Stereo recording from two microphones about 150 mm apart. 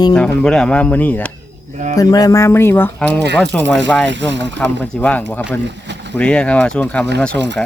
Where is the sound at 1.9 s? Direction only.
25° left (ahead or behind).